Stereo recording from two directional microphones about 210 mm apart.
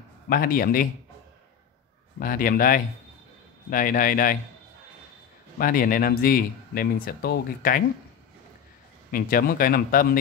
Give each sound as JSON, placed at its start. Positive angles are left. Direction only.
{"t": 0.3, "sound": "speech", "side_deg": 45}
{"t": 2.1, "sound": "speech", "side_deg": 45}
{"t": 5.6, "sound": "speech", "side_deg": 45}
{"t": 9.1, "sound": "speech", "side_deg": 45}